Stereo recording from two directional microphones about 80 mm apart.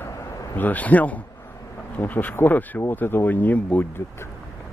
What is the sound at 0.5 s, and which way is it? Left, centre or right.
Speech, left.